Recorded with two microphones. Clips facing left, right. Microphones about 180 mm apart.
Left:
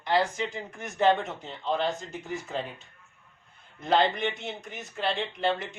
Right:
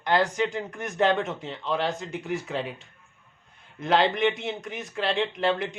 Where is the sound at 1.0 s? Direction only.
80° right.